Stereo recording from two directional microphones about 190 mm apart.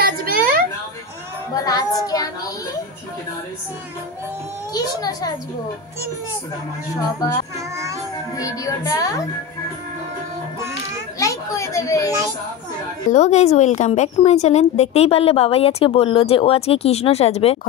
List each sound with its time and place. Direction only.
0.0 s a sound: 50° right (ahead or behind)
1.5 s a child's voice: 20° left (ahead or behind)
4.7 s a child's voice: 20° left (ahead or behind)
8.4 s a child's voice: 15° left (ahead or behind)
11.1 s children playing: 15° left (ahead or behind)
13.1 s speech: 35° left (ahead or behind)